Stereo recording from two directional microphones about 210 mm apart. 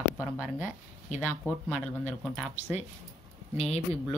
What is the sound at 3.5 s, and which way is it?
Speech, 30° left (ahead or behind).